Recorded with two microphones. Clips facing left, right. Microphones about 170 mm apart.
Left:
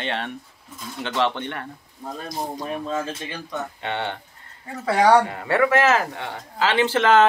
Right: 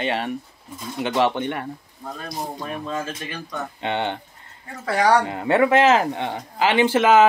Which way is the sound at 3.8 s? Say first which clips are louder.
Right 5 dB; 20° right (ahead or behind).